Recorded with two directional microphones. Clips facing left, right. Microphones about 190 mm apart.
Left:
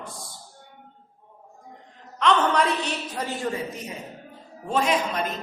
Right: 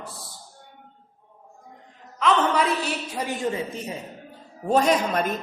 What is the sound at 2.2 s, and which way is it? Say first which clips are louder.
A woman's voice: even; 5° right (ahead or behind).